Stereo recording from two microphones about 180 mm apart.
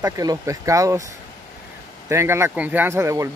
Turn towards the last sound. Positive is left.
turn(degrees=-15)  # may be behind; listen again after turning